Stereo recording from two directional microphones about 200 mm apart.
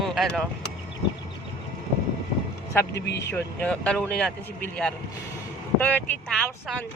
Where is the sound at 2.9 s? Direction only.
60° left (ahead or behind).